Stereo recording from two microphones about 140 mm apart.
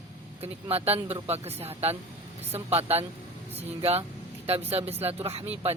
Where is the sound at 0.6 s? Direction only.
45° right (ahead or behind).